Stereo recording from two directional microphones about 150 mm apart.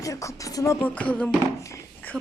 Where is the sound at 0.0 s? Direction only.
20° left (ahead or behind).